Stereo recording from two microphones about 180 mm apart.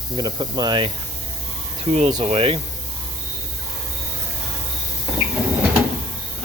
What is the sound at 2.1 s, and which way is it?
Speech, 30° right (ahead or behind).